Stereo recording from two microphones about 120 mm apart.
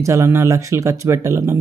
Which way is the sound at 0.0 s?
25° right (ahead or behind).